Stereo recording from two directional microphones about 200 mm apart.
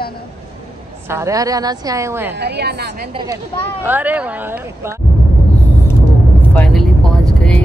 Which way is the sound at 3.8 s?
10° right (ahead or behind).